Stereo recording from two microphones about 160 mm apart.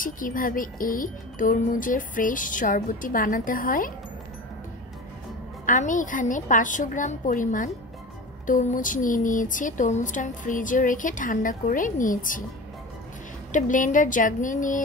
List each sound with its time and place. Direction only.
0.0 s speech: 60° left (ahead or behind)
5.7 s a woman's voice: 55° left (ahead or behind)
13.5 s speech: 55° left (ahead or behind)